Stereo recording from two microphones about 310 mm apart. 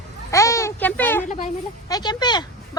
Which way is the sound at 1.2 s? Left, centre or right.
Left.